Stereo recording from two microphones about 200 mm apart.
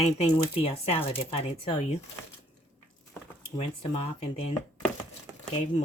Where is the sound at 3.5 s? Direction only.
35° left (ahead or behind).